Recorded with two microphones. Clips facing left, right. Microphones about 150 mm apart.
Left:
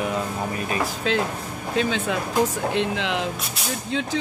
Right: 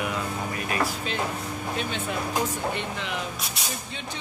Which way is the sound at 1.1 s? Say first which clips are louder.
Left 5 dB; 90° left.